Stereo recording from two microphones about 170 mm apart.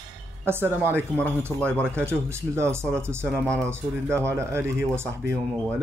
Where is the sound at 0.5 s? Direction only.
15° right (ahead or behind).